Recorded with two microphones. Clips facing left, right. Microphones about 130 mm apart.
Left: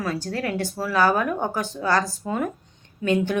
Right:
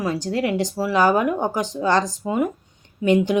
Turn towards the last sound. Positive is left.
turn(degrees=-15)  # may be behind; listen again after turning